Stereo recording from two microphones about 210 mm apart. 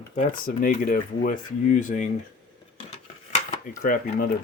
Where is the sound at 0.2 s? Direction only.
40° left (ahead or behind).